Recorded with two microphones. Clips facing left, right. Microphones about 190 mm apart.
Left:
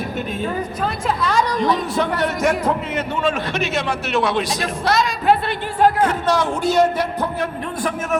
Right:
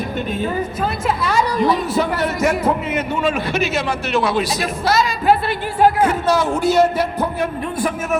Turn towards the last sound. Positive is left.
turn(degrees=-10)  # may be behind; listen again after turning